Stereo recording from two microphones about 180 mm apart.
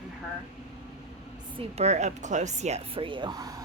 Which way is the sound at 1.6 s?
35° right (ahead or behind).